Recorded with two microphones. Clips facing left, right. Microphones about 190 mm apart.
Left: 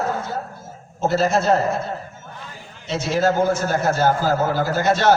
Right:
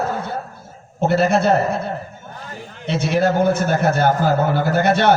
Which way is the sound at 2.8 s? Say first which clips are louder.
Right 2 dB; 60° right (ahead or behind).